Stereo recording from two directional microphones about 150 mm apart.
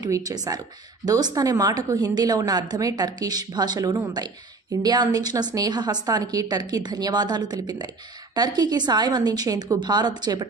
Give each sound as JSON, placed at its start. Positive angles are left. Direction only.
{"t": 0.0, "sound": "a woman's voice", "side_deg": -25}